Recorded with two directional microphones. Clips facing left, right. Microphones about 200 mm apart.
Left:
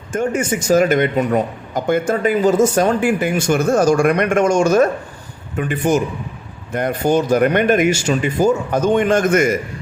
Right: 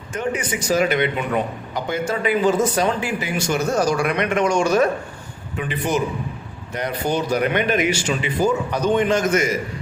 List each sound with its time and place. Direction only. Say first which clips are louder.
0.1 s speech: left 6 dB; 45° left (ahead or behind)